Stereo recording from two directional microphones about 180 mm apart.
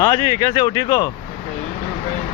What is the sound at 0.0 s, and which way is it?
Speech, 20° left (ahead or behind).